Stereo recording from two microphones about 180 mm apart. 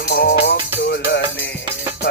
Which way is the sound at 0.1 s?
60° left (ahead or behind).